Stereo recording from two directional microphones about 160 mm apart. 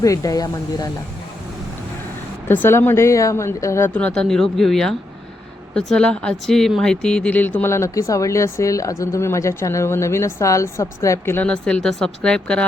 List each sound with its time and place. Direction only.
0.0 s speech: 20° left (ahead or behind)
2.5 s speech: 15° left (ahead or behind)